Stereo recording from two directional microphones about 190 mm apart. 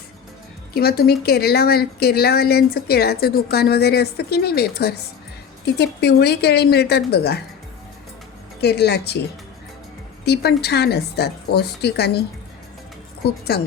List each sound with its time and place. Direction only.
0.7 s speech: 55° left (ahead or behind)
8.6 s speech: 60° left (ahead or behind)
10.2 s speech: 60° left (ahead or behind)
13.5 s speech: 55° left (ahead or behind)